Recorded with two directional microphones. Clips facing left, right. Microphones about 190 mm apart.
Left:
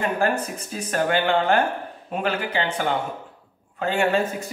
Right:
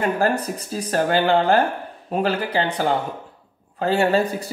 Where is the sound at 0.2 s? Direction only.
35° right (ahead or behind).